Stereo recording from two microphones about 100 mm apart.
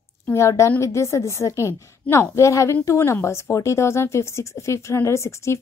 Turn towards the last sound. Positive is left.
turn(degrees=30)  # may be behind; listen again after turning